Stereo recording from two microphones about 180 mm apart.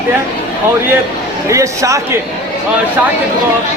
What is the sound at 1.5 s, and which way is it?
Speech, 15° right (ahead or behind).